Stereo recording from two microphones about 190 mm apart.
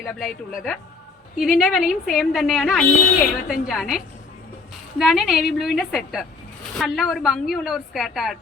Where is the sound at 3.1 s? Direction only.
50° left (ahead or behind).